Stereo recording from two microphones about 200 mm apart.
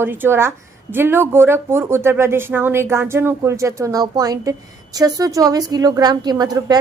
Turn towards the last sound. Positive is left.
turn(degrees=-20)  # may be behind; listen again after turning